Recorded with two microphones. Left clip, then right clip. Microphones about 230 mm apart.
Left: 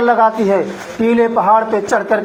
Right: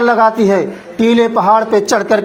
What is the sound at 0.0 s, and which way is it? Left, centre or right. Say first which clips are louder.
A man's voice: right 2 dB; right.